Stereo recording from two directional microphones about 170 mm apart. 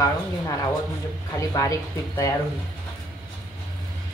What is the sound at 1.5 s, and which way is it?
Speech, 20° left (ahead or behind).